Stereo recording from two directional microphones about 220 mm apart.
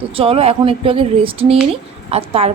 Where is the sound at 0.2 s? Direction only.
25° right (ahead or behind).